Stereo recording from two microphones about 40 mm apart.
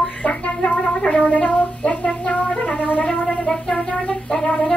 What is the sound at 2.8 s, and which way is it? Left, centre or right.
Music, left.